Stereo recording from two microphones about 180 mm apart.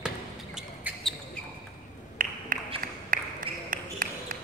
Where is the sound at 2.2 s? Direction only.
50° right (ahead or behind).